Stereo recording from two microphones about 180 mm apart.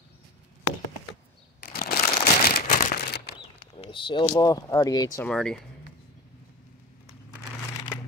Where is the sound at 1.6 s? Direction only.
55° left (ahead or behind).